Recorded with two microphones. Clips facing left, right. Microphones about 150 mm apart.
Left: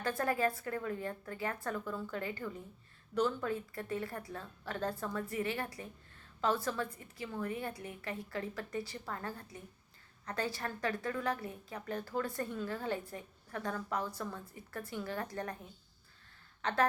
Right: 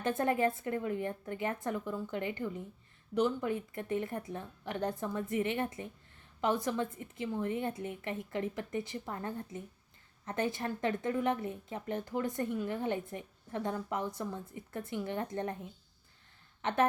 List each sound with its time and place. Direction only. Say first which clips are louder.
0.0 s a woman's voice: right 3 dB; 20° right (ahead or behind)